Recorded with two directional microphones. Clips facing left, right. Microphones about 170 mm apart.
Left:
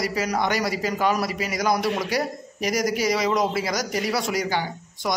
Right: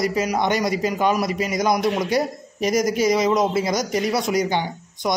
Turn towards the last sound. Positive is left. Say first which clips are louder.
# right 3 dB
turn(degrees=-20)  # may be behind; listen again after turning